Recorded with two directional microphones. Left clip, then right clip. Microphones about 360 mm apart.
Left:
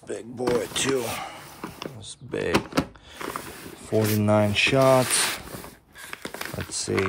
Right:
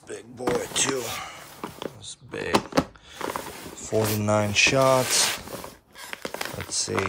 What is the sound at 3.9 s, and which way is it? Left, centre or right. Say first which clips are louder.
Speech: left 1 dB; centre.